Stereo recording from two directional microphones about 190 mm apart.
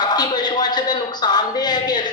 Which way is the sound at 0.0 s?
20° left (ahead or behind).